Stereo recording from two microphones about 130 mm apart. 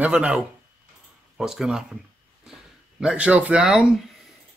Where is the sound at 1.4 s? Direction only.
5° right (ahead or behind).